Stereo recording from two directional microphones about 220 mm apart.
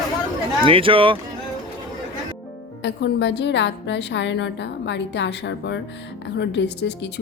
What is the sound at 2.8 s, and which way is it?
A woman's voice, 50° left (ahead or behind).